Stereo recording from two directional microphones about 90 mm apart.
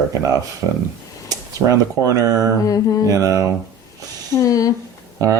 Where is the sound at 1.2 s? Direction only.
40° right (ahead or behind).